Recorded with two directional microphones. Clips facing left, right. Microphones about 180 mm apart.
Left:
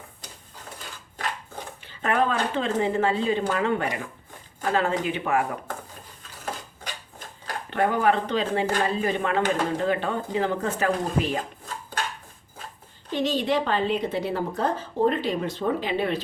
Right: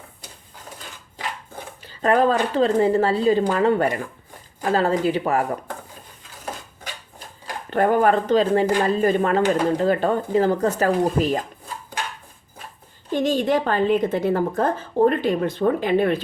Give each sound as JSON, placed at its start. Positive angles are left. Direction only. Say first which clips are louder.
{"t": 1.8, "sound": "speech", "louder": "right 6 dB", "side_deg": -40}
{"t": 7.7, "sound": "a woman's voice", "louder": "right 5 dB", "side_deg": -45}
{"t": 13.1, "sound": "a woman's voice", "louder": "right 4 dB", "side_deg": -50}